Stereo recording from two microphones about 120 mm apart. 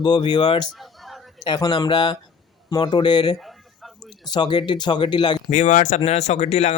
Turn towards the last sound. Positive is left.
turn(degrees=65)  # may be behind; listen again after turning